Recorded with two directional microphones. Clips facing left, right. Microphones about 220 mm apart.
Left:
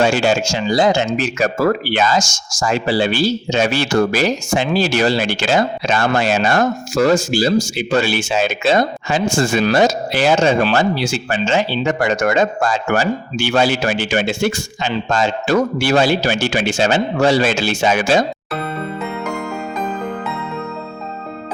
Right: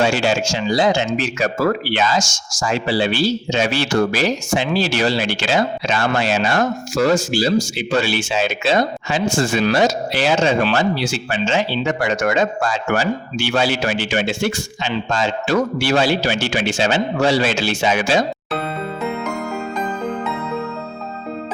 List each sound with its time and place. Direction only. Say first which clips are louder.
0.0 s speech: left 2 dB; 45° left (ahead or behind)